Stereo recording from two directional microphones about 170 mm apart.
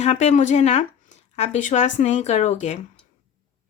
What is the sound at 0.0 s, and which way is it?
Speech, 40° left (ahead or behind).